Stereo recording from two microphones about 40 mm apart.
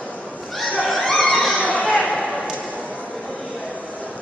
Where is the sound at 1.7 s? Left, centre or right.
Left.